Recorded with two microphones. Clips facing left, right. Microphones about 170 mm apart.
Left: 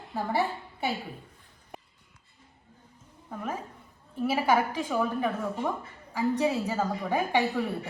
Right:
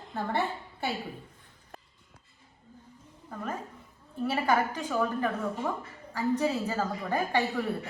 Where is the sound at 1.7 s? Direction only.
15° left (ahead or behind).